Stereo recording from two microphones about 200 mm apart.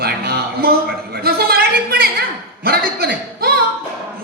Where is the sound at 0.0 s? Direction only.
50° right (ahead or behind).